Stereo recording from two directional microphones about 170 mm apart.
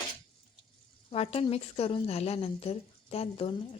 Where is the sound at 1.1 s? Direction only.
35° left (ahead or behind).